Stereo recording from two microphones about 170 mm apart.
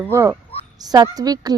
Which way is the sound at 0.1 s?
15° right (ahead or behind).